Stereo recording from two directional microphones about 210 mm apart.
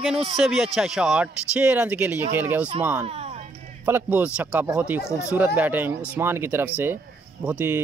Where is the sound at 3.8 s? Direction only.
10° right (ahead or behind).